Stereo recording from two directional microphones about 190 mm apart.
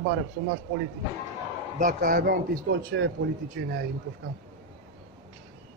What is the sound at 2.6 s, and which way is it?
Speech, 70° right (ahead or behind).